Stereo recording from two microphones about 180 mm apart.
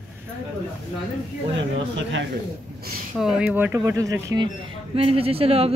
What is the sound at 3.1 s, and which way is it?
Speech, 5° right (ahead or behind).